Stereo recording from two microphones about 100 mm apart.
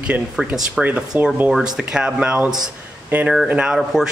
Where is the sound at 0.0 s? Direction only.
10° right (ahead or behind).